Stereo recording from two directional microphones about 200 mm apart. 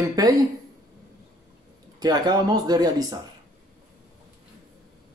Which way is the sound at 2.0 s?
20° right (ahead or behind).